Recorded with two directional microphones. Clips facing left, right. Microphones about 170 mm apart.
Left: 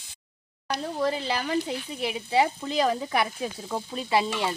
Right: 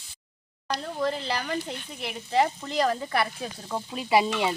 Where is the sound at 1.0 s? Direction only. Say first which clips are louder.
Left 2 dB; 10° left (ahead or behind).